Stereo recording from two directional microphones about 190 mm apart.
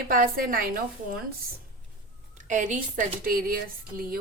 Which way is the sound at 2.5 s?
40° right (ahead or behind).